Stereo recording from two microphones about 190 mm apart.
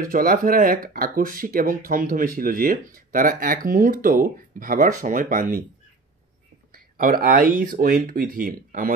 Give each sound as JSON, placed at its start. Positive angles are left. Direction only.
{"t": 0.0, "sound": "speech", "side_deg": -50}
{"t": 6.7, "sound": "speech", "side_deg": -50}